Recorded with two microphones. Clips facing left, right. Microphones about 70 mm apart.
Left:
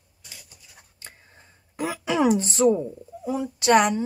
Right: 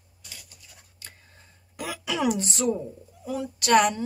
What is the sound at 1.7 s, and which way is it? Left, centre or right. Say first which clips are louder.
A woman's voice: left 6 dB; left.